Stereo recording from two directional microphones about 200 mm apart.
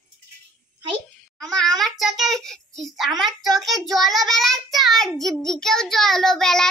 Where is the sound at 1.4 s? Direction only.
Centre (ahead or behind).